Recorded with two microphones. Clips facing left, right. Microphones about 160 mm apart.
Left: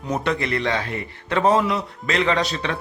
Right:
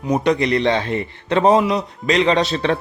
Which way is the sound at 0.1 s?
20° right (ahead or behind).